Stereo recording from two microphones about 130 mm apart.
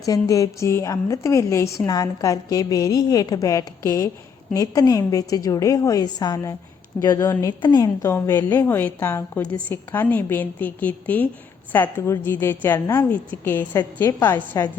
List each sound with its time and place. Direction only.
0.0 s a woman's voice: 25° left (ahead or behind)
7.6 s a woman's voice: 30° left (ahead or behind)
8.0 s a woman's voice: 20° left (ahead or behind)